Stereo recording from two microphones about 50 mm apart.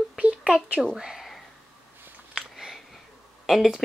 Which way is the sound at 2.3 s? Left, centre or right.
Centre.